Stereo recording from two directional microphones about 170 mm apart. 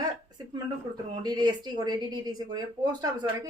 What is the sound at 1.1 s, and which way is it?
Speech, 25° right (ahead or behind).